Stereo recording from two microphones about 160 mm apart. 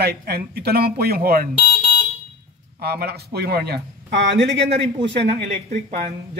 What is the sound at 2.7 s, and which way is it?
Speech, 80° right.